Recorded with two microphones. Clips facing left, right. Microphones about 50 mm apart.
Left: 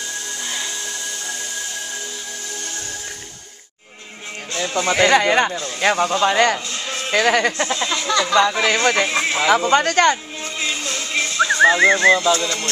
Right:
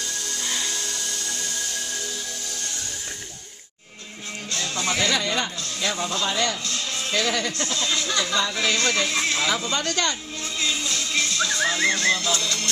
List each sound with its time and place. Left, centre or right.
0.5 s a sound: centre
4.8 s speech: left
6.7 s music: left
7.1 s speech: left
7.5 s speech: left
8.3 s speech: left
9.2 s speech: left
9.5 s speech: left
10.8 s music: left
12.4 s speech: left